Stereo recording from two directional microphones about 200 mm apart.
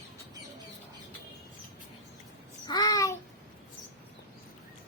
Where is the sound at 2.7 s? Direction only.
20° left (ahead or behind).